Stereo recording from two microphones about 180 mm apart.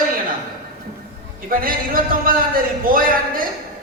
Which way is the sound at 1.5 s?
50° right (ahead or behind).